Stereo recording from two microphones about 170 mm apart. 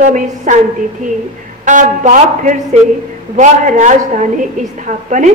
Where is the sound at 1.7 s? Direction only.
45° right (ahead or behind).